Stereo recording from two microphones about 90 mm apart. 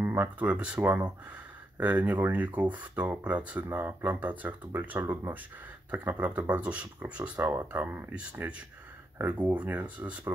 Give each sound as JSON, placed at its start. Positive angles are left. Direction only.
{"t": 0.0, "sound": "speech", "side_deg": -20}